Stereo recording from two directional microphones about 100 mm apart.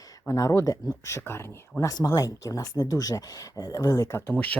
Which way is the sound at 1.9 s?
40° left (ahead or behind).